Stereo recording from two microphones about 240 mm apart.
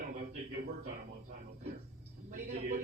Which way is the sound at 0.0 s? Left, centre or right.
Right.